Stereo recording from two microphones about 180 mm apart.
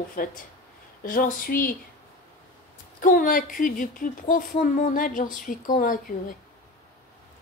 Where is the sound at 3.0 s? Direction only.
50° left (ahead or behind).